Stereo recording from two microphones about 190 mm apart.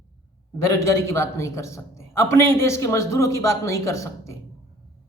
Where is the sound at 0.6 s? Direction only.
15° left (ahead or behind).